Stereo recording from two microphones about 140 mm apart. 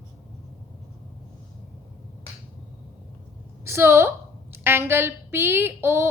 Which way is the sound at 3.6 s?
20° right (ahead or behind).